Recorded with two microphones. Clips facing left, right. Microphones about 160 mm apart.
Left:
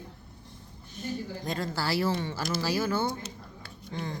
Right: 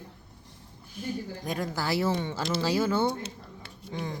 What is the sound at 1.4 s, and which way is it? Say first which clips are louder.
A woman's voice: right 1 dB; 10° right (ahead or behind).